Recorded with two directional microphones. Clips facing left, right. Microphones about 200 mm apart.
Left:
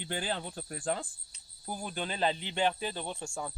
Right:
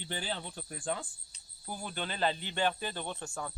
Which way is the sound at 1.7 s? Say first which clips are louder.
Left 2 dB; 10° left (ahead or behind).